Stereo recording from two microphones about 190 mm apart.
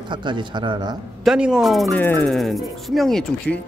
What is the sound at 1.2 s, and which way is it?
Speech, 5° right (ahead or behind).